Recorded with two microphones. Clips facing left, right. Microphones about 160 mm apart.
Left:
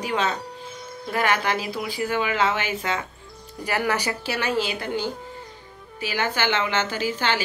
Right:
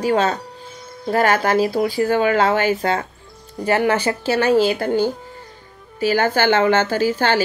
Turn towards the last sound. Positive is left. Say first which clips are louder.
# right 7 dB
turn(degrees=-40)  # may be behind; listen again after turning